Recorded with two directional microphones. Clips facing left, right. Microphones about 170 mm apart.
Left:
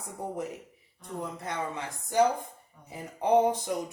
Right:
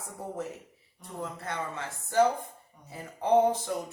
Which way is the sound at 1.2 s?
15° left (ahead or behind).